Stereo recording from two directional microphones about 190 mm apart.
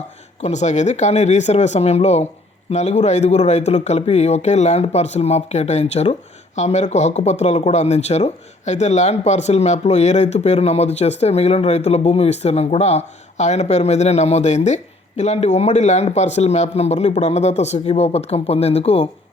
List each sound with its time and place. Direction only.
0.4 s speech: 35° left (ahead or behind)